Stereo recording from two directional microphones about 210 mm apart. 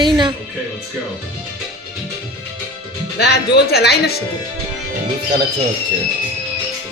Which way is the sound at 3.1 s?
50° left (ahead or behind).